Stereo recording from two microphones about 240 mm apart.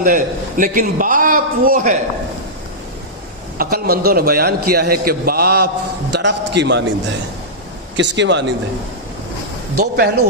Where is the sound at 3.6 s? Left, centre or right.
Right.